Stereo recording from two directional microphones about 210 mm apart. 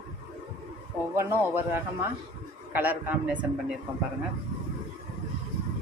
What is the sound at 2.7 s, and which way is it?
Speech, 10° right (ahead or behind).